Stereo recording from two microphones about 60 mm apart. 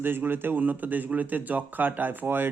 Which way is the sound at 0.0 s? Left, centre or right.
Right.